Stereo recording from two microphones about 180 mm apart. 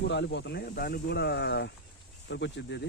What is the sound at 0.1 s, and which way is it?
Speech, 70° left (ahead or behind).